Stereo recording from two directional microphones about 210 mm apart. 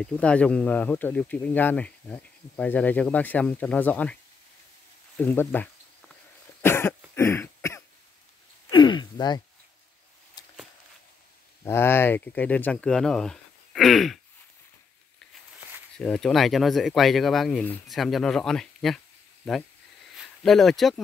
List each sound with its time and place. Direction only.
0.0 s speech: 5° left (ahead or behind)
5.1 s a sound: 10° left (ahead or behind)
6.6 s cough: 10° left (ahead or behind)
7.2 s a sound: 10° left (ahead or behind)
11.6 s speech: 10° left (ahead or behind)
16.0 s speech: centre (ahead or behind)
20.2 s speech: centre (ahead or behind)